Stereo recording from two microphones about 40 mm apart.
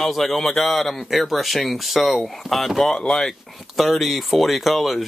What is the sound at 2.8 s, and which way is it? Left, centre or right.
Speech, centre.